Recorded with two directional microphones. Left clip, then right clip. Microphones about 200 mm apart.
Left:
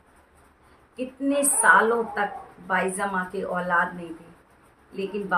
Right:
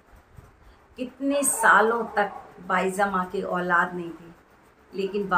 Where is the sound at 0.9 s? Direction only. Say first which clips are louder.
Left 1 dB; 10° right (ahead or behind).